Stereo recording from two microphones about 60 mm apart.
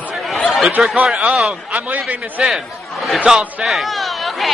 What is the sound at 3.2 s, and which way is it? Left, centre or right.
Speech, centre.